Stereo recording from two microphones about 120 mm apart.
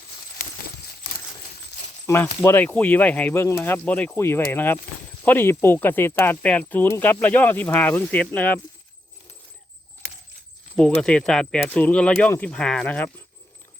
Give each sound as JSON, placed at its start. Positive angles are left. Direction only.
{"t": 2.4, "sound": "speech", "side_deg": 20}
{"t": 10.8, "sound": "speech", "side_deg": 5}